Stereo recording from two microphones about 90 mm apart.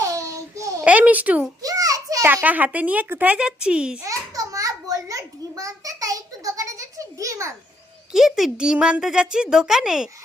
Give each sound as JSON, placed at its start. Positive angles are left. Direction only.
{"t": 0.0, "sound": "babbling", "side_deg": -35}
{"t": 0.9, "sound": "speech", "side_deg": -15}
{"t": 1.6, "sound": "a sound", "side_deg": -40}
{"t": 2.2, "sound": "speech", "side_deg": -20}
{"t": 4.0, "sound": "a sound", "side_deg": -40}
{"t": 8.1, "sound": "speech", "side_deg": -5}